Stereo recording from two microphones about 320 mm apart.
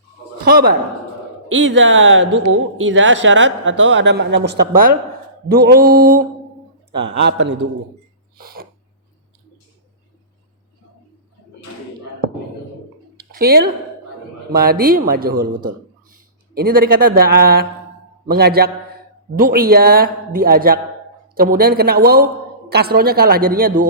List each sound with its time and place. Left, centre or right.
0.4 s speech: right
8.4 s a sound: right
13.3 s speech: right